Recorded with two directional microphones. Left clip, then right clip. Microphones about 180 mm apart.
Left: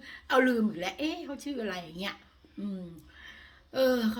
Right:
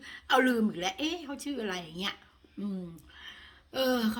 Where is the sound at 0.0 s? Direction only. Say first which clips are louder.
Even; 30° right (ahead or behind).